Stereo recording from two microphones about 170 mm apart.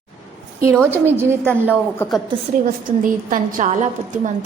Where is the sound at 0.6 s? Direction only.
15° right (ahead or behind).